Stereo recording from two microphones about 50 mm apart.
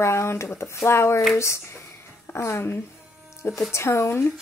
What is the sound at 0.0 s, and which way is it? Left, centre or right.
Speech, left.